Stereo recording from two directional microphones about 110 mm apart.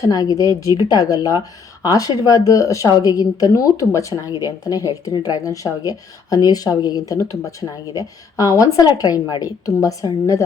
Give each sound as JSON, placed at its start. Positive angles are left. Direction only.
{"t": 0.0, "sound": "speech", "side_deg": 35}